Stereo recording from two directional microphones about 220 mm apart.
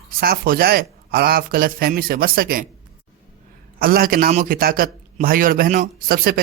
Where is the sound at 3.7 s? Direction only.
40° right (ahead or behind).